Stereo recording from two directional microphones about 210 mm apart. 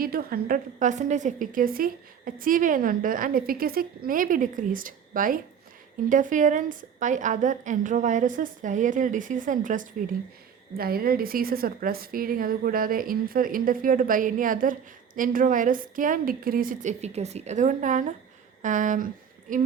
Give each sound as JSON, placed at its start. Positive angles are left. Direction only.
{"t": 0.0, "sound": "a woman's voice", "side_deg": -45}